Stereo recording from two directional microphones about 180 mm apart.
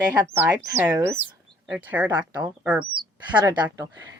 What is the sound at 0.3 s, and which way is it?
Speech, 10° right (ahead or behind).